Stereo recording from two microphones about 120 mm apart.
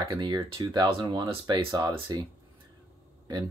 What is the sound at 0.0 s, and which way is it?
Speech, 30° right (ahead or behind).